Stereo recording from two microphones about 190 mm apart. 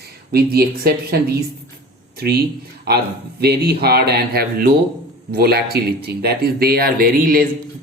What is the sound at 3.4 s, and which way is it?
Speech, 55° right (ahead or behind).